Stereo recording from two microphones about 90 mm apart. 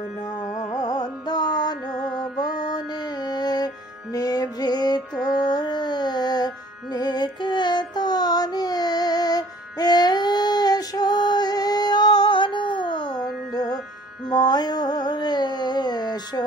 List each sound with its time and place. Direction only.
0.7 s music: 45° left (ahead or behind)
14.3 s carnatic music: 50° left (ahead or behind)